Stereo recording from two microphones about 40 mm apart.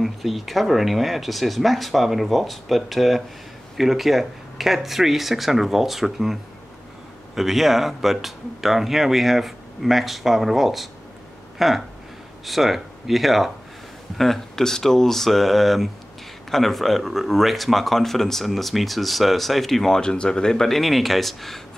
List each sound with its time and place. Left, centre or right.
0.0 s speech: centre
20.0 s speech: left
20.6 s speech: centre